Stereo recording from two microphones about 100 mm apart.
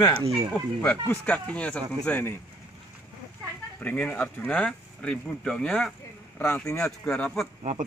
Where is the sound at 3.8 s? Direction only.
15° left (ahead or behind).